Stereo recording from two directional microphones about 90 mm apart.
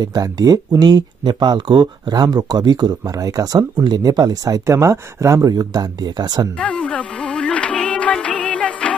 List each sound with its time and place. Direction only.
0.0 s speech: 45° right (ahead or behind)
3.5 s speech: 60° right (ahead or behind)
4.0 s speech: 45° right (ahead or behind)
5.5 s speech: 45° right (ahead or behind)
6.6 s music: 15° left (ahead or behind)